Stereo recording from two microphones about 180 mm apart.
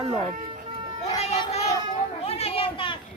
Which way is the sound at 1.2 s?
35° left (ahead or behind).